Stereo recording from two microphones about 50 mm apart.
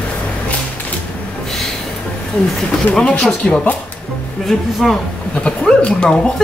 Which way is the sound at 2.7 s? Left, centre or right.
Centre.